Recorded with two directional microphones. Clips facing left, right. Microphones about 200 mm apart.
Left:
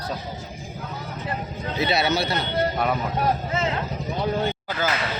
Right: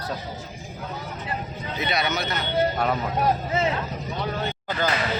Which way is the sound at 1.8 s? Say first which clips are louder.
Left 4 dB; 30° left (ahead or behind).